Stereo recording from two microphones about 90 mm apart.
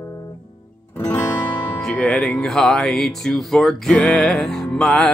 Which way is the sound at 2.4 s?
5° left (ahead or behind).